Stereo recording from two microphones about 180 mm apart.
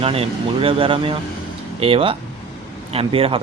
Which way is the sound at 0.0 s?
30° right (ahead or behind).